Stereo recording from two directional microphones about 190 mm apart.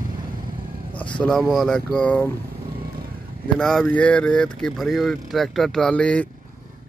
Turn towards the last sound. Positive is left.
turn(degrees=5)  # may be behind; listen again after turning